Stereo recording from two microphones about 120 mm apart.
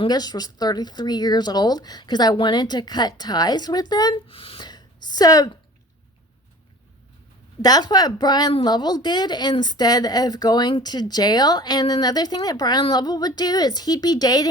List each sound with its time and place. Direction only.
0.0 s speech: 35° left (ahead or behind)
4.3 s a sound: 50° left (ahead or behind); by 5.5 s 30° left (ahead or behind)
7.6 s speech: 35° left (ahead or behind)